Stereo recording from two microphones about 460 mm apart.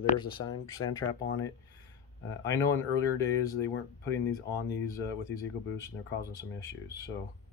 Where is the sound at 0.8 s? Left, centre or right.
Left.